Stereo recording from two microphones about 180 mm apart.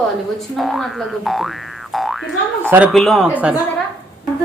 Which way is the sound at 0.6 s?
Centre (ahead or behind).